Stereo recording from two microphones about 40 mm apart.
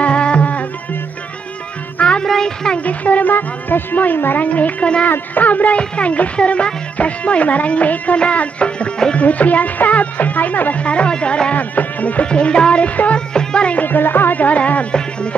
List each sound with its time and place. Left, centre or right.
0.0 s music: left
2.0 s music: left
2.4 s speech: centre
2.8 s speech: left
4.5 s music: left
5.8 s music: left
10.8 s speech: left
11.5 s music: left
12.3 s speech: left
12.8 s music: left
13.3 s music: centre
13.8 s speech: left
14.4 s music: left